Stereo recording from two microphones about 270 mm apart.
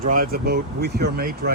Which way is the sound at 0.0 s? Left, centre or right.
Right.